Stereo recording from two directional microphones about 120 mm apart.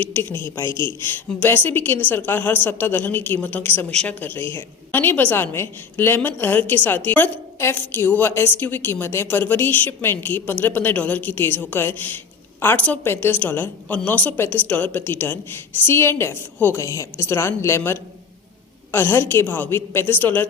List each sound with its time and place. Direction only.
0.0 s a woman's voice: 15° left (ahead or behind)